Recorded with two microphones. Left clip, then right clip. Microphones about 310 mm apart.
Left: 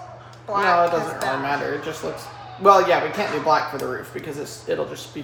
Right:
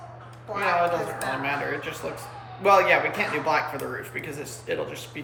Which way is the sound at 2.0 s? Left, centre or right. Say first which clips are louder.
Left 4 dB; centre.